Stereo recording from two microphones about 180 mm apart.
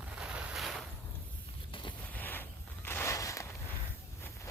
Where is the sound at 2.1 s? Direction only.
10° left (ahead or behind).